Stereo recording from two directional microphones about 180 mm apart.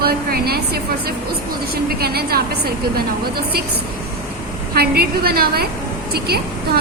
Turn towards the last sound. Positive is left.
turn(degrees=-60)  # may be behind; listen again after turning